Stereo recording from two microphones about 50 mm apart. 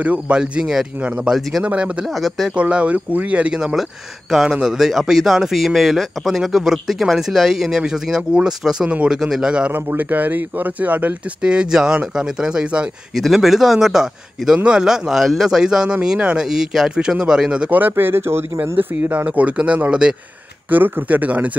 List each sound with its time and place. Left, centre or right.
0.3 s a man's voice: centre
2.0 s speech: centre
2.5 s speech: right
3.5 s a man's voice: centre
9.7 s speech: right
11.4 s a man's voice: centre
13.1 s a man's voice: centre
16.4 s a man's voice: centre
17.6 s speech: right
19.2 s a man's voice: right
20.7 s speech: right